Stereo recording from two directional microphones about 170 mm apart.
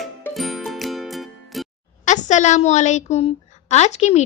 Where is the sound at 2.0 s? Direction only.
45° left (ahead or behind).